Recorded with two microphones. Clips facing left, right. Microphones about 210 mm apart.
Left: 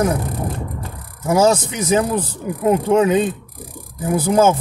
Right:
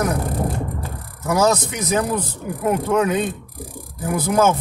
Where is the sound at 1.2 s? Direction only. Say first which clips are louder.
Left 3 dB; 30° left (ahead or behind).